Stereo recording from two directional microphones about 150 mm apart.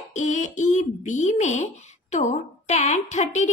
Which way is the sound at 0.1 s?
55° left (ahead or behind).